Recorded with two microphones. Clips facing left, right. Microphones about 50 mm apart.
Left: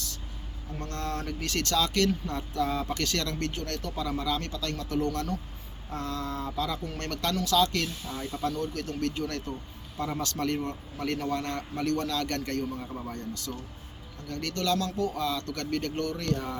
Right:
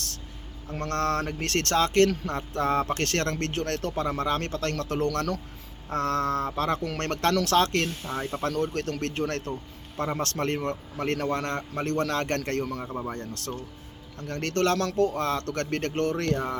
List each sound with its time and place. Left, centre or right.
0.7 s speech: right
1.3 s speech: right
5.9 s speech: right
6.8 s speech: right
7.1 s speech: right
12.9 s speech: right
13.1 s speech: right